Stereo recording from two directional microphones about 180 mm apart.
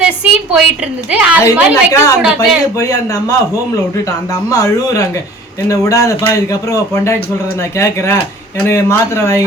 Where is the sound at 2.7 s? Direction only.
20° left (ahead or behind).